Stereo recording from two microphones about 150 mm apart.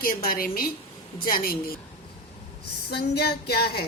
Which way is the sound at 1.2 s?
85° left.